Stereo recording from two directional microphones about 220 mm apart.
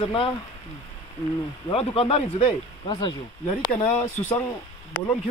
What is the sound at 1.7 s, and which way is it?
Speech, 25° left (ahead or behind).